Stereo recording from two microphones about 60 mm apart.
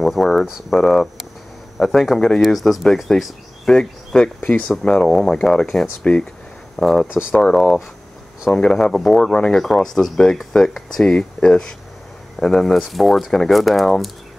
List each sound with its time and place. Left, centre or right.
0.0 s speech: centre
7.1 s speech: centre
7.3 s speech: centre